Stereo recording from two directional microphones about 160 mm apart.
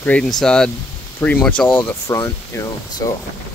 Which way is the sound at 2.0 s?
20° left (ahead or behind).